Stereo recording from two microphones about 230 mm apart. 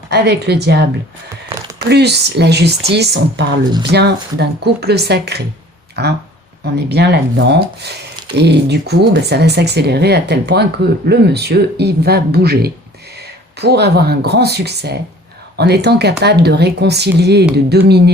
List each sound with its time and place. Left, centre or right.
0.1 s speech: right
1.9 s speech: right
13.1 s a sound: right
14.3 s speech: right